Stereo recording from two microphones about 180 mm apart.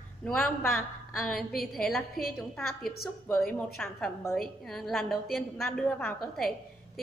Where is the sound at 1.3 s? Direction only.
55° left (ahead or behind).